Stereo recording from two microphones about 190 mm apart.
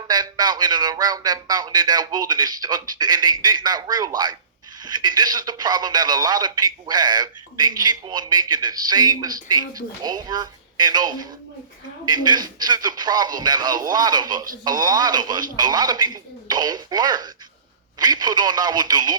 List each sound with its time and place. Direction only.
0.1 s speech: 20° right (ahead or behind)